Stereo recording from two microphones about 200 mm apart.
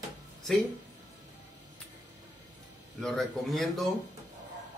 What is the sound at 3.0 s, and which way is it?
Speech, centre (ahead or behind).